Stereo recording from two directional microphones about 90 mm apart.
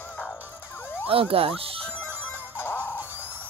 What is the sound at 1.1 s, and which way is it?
Speech, 90° right.